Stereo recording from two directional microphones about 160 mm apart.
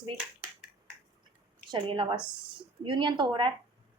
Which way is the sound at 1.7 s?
30° right (ahead or behind).